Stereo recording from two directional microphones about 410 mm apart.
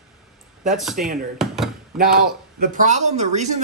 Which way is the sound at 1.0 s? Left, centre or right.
Centre.